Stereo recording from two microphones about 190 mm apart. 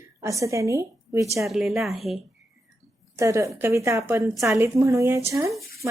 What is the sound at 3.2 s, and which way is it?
A woman's voice, 15° right (ahead or behind).